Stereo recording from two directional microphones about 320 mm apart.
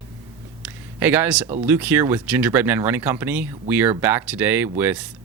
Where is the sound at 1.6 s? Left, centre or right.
Centre.